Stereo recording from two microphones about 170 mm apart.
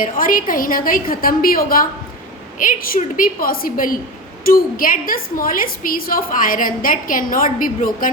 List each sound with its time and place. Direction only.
0.0 s a woman's voice: 55° left (ahead or behind)